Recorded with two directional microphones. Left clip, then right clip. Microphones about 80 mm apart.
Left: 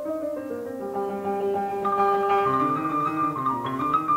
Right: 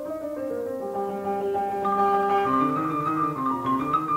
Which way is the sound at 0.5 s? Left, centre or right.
Centre.